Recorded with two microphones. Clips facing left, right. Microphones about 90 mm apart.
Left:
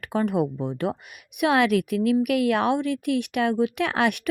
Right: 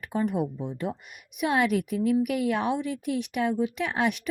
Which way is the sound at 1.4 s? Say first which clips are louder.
Left 4 dB; 80° left.